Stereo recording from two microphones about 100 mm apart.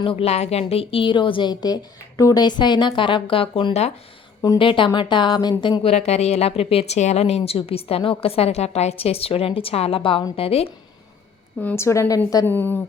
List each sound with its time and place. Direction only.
0.0 s a woman's voice: 65° left (ahead or behind); by 3.9 s 90° left
4.5 s a woman's voice: 55° left (ahead or behind)
5.8 s a woman's voice: 90° left; by 10.2 s 60° left (ahead or behind)
10.3 s a woman's voice: 75° left (ahead or behind)
11.6 s a woman's voice: 25° left (ahead or behind)
12.5 s a woman's voice: 20° left (ahead or behind)